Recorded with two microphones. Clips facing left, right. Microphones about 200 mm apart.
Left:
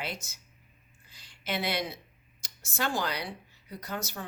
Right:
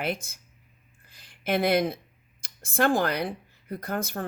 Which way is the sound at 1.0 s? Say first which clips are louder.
Right 7 dB; 55° right (ahead or behind).